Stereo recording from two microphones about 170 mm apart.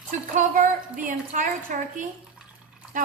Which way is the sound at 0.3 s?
50° right (ahead or behind).